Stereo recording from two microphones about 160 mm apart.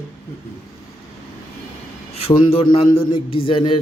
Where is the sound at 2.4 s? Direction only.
35° left (ahead or behind).